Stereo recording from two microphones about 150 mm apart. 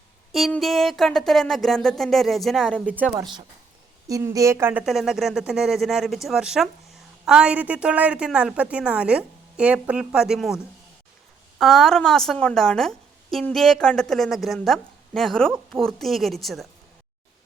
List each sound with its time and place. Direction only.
0.5 s a woman's voice: centre (ahead or behind)
3.2 s a woman's voice: 30° right (ahead or behind)
4.0 s a woman's voice: 20° right (ahead or behind); by 10.6 s centre (ahead or behind)
11.6 s a woman's voice: centre (ahead or behind)